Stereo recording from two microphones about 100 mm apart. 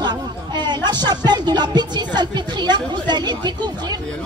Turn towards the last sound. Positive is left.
turn(degrees=-45)  # may be behind; listen again after turning